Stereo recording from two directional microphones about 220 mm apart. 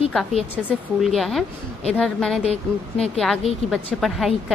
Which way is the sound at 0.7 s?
Centre (ahead or behind).